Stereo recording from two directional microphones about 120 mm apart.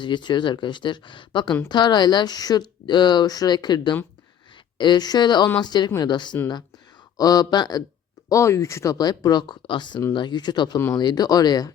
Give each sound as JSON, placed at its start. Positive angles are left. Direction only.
{"t": 0.0, "sound": "speech", "side_deg": 40}